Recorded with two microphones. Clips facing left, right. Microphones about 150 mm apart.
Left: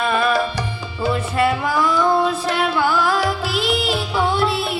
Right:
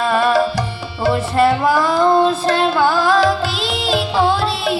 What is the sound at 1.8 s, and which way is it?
Music, 90° right.